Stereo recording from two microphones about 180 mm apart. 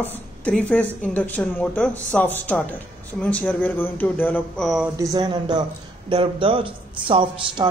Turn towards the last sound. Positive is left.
turn(degrees=-30)  # may be behind; listen again after turning